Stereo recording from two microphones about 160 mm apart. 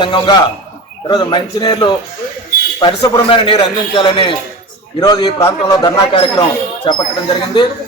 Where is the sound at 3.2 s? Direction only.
35° left (ahead or behind).